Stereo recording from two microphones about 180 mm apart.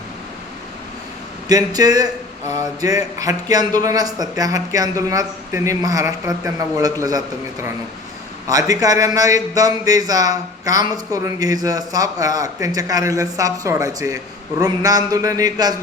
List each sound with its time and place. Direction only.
1.5 s a man's voice: 20° right (ahead or behind)
8.4 s a man's voice: 20° right (ahead or behind)